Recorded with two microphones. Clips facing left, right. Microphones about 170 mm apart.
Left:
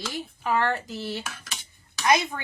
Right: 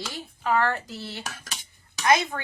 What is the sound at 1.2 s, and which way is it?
Dishes, 40° right (ahead or behind).